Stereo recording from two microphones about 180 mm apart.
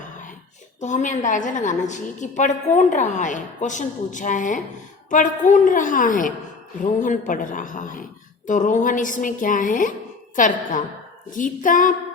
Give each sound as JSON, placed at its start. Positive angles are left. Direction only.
{"t": 0.8, "sound": "a woman's voice", "side_deg": 45}